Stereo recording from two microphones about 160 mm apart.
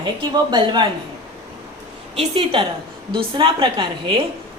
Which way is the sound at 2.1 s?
35° right (ahead or behind).